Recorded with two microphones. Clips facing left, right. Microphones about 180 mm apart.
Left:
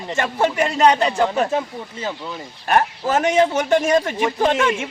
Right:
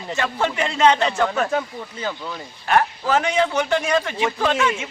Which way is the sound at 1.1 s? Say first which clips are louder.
Left 2 dB; 15° left (ahead or behind).